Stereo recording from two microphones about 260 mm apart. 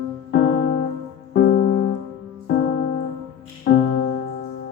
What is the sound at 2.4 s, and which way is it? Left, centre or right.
Music, left.